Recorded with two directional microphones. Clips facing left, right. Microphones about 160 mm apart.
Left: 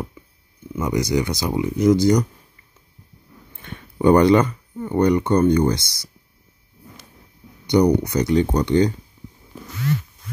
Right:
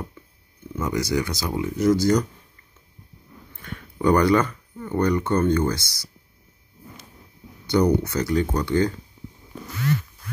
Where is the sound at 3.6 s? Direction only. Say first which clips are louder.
Left 4 dB; 25° left (ahead or behind).